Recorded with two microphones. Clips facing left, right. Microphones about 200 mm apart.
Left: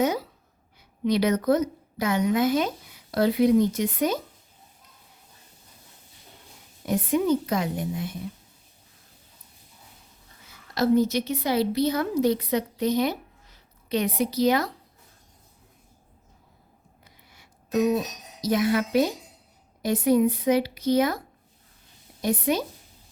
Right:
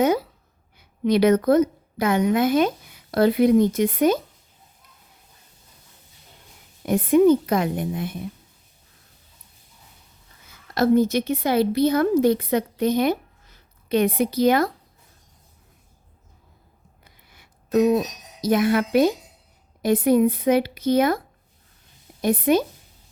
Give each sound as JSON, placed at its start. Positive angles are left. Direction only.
{"t": 1.0, "sound": "a woman's voice", "side_deg": -55}
{"t": 6.8, "sound": "a woman's voice", "side_deg": -55}
{"t": 10.8, "sound": "a woman's voice", "side_deg": -55}
{"t": 17.0, "sound": "music", "side_deg": -55}
{"t": 18.4, "sound": "a woman's voice", "side_deg": -55}
{"t": 22.2, "sound": "a woman's voice", "side_deg": -55}